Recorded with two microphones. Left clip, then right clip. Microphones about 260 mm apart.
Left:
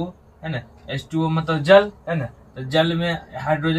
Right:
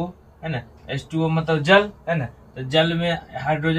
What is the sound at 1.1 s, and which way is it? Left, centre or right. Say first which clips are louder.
Speech: right 1 dB; centre.